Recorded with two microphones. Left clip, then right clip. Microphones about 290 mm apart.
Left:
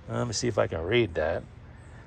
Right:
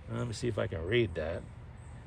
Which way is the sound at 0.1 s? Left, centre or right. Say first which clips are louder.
Left 7 dB; centre.